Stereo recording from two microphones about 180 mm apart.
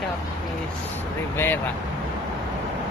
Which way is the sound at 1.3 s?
15° left (ahead or behind).